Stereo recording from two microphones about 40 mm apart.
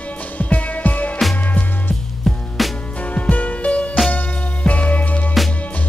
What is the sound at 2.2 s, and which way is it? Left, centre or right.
Music, centre.